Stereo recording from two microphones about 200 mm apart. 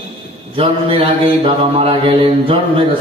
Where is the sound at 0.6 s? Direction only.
25° right (ahead or behind).